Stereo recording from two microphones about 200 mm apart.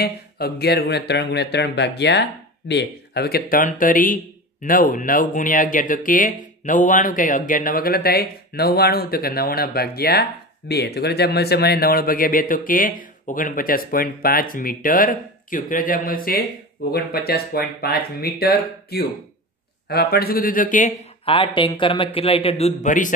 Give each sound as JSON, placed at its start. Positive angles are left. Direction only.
{"t": 0.0, "sound": "a man's voice", "side_deg": 55}
{"t": 21.3, "sound": "a man's voice", "side_deg": 25}